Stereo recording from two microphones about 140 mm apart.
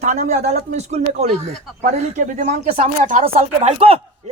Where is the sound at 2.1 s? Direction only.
70° right (ahead or behind).